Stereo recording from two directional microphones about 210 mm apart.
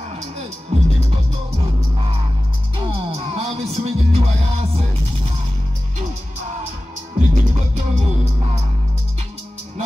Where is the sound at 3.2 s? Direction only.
30° right (ahead or behind).